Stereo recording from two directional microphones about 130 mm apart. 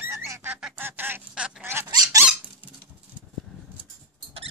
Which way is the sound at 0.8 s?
15° right (ahead or behind).